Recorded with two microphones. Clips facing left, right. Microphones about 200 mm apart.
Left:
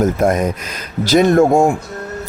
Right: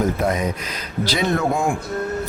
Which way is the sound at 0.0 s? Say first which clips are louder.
Left 6 dB; 45° left (ahead or behind).